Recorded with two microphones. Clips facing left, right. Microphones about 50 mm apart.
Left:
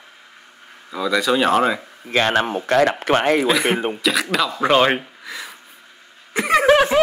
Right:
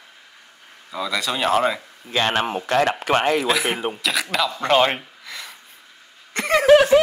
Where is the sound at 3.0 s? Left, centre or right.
Left.